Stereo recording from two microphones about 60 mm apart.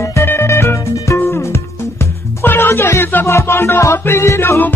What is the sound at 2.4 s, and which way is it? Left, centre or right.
Music, left.